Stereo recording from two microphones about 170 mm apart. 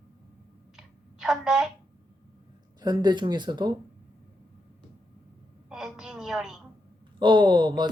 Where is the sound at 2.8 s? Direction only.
25° right (ahead or behind).